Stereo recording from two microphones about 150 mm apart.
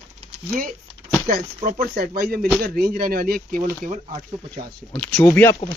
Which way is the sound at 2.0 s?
90° right.